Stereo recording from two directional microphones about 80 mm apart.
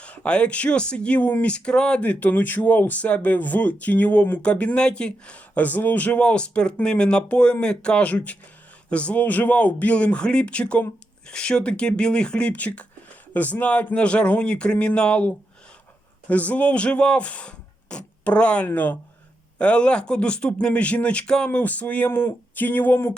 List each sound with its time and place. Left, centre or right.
0.0 s speech: centre